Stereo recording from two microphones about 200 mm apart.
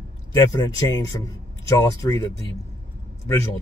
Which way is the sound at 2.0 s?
15° left (ahead or behind).